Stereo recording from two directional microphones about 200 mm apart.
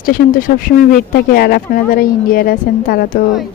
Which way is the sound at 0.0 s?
45° left (ahead or behind).